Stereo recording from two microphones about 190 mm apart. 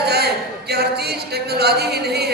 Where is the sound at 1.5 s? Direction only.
60° right (ahead or behind).